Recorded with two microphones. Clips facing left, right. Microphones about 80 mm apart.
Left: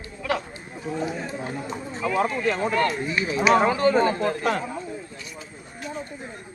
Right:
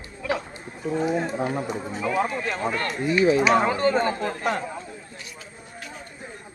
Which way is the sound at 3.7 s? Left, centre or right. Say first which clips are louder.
Left 2 dB; centre.